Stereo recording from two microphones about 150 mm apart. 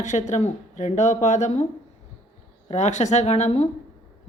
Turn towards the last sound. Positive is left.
turn(degrees=45)  # may be behind; listen again after turning